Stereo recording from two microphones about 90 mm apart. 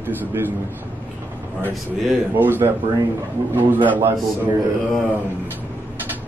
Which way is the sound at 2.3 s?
25° right (ahead or behind).